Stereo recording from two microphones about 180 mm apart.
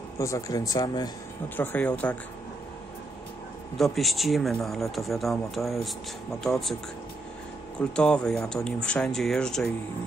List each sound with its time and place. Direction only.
0.2 s speech: 20° left (ahead or behind)
1.6 s speech: 10° left (ahead or behind)
3.7 s speech: centre (ahead or behind)
7.9 s speech: 5° left (ahead or behind)